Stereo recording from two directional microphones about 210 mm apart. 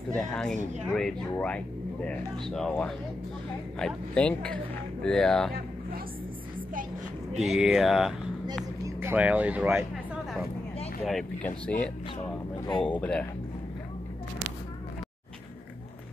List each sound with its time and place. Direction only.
0.1 s speech: 5° left (ahead or behind)
7.3 s speech: centre (ahead or behind)
11.1 s speech: 5° left (ahead or behind)
12.5 s speech: 20° left (ahead or behind)
12.8 s speech: 5° left (ahead or behind)